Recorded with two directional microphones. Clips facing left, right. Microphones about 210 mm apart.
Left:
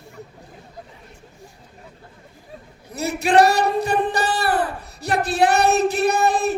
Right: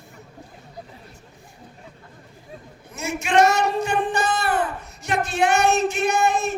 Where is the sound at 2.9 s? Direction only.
35° left (ahead or behind).